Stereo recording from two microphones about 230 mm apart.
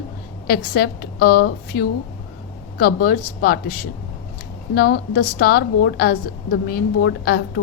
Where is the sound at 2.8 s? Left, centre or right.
Left.